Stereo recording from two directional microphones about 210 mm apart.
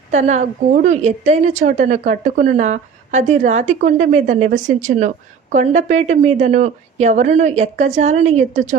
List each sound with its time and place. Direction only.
0.1 s a woman's voice: 35° right (ahead or behind)